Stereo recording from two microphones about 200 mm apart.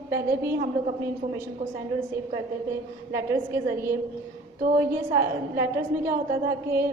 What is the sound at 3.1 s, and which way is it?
Speech, 15° right (ahead or behind).